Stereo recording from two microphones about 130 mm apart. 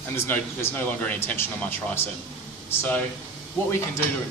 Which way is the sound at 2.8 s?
10° left (ahead or behind).